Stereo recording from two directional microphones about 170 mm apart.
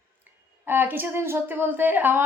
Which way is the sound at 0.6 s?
10° right (ahead or behind).